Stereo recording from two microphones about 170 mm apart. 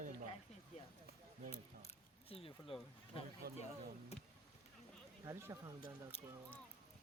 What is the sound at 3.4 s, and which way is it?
Speech, 65° right (ahead or behind).